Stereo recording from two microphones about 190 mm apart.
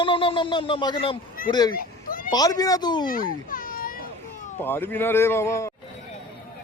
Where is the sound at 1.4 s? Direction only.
50° left (ahead or behind).